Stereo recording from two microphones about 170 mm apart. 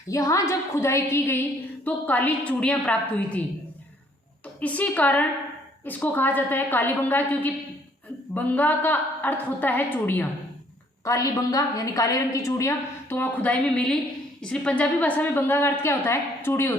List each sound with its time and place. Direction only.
0.1 s a woman's voice: 20° left (ahead or behind)
4.6 s a woman's voice: 10° left (ahead or behind)